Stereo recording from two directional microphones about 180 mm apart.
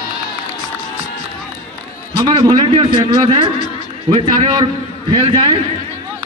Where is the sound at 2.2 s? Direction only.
25° right (ahead or behind).